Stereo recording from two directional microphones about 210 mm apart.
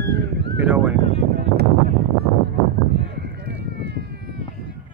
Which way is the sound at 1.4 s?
50° right (ahead or behind).